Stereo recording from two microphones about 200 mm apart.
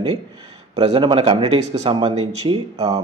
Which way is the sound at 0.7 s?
25° right (ahead or behind).